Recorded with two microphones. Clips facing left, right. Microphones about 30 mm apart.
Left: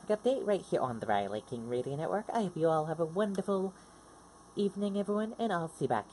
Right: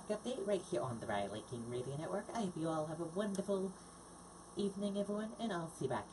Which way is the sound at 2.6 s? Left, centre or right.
Left.